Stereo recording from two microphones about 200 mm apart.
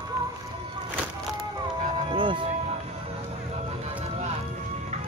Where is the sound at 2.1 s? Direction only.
25° right (ahead or behind).